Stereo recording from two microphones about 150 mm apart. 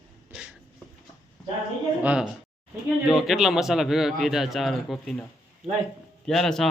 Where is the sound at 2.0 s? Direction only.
10° right (ahead or behind).